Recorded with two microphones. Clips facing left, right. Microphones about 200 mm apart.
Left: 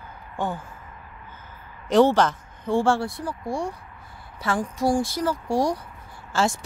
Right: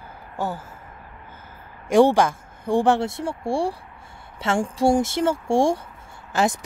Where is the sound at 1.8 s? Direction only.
10° right (ahead or behind).